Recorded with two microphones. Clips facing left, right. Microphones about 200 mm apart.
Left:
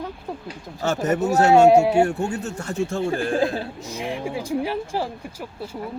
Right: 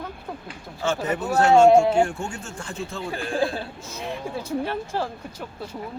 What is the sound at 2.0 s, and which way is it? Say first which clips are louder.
Speech: left 7 dB; 40° left (ahead or behind).